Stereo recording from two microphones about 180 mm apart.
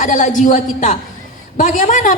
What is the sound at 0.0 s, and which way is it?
A woman's voice, 45° left (ahead or behind).